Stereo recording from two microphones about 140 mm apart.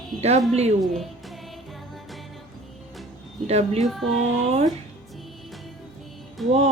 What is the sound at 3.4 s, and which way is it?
Speech, 50° right (ahead or behind).